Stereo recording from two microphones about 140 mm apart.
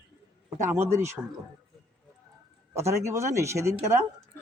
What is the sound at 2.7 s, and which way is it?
A man's voice, 20° right (ahead or behind).